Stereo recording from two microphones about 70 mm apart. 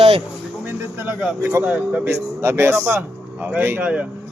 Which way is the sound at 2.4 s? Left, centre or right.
Right.